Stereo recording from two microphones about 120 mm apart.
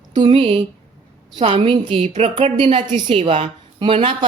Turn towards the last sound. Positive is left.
turn(degrees=-50)  # may be behind; listen again after turning